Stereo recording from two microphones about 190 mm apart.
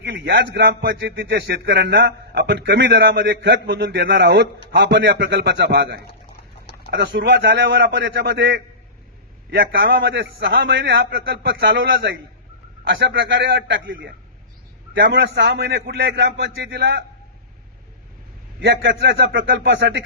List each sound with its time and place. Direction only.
0.0 s a man's voice: 65° right (ahead or behind)
12.9 s a man's voice: 70° right (ahead or behind)
18.6 s a man's voice: 65° right (ahead or behind)